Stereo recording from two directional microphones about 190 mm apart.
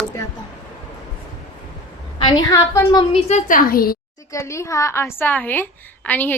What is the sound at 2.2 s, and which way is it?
Speech, 20° left (ahead or behind).